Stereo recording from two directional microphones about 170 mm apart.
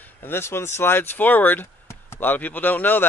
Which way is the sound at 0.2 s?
15° left (ahead or behind).